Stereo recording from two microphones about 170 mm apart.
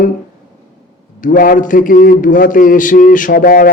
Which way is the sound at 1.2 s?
55° left (ahead or behind).